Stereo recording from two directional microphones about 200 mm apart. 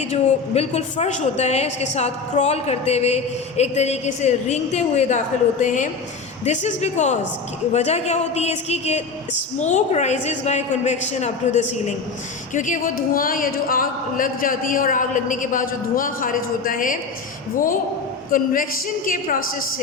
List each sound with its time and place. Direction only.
0.0 s a woman's voice: 35° left (ahead or behind)
18.3 s speech: 45° left (ahead or behind)